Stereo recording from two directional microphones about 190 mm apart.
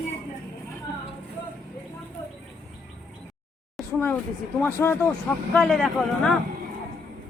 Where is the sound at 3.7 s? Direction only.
5° left (ahead or behind).